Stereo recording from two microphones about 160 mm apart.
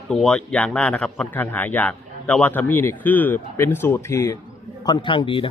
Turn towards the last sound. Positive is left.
turn(degrees=30)  # may be behind; listen again after turning